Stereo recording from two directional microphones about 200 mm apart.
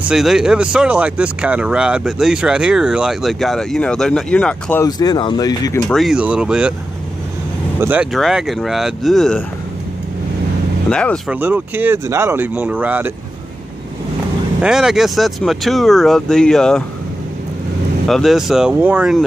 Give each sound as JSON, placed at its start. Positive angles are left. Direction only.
{"t": 0.1, "sound": "speech", "side_deg": 0}
{"t": 4.8, "sound": "speech", "side_deg": 20}
{"t": 5.9, "sound": "speech", "side_deg": 0}
{"t": 7.8, "sound": "speech", "side_deg": -5}
{"t": 10.9, "sound": "speech", "side_deg": 5}
{"t": 11.3, "sound": "speech", "side_deg": -10}
{"t": 14.6, "sound": "speech", "side_deg": -5}
{"t": 18.0, "sound": "speech", "side_deg": 0}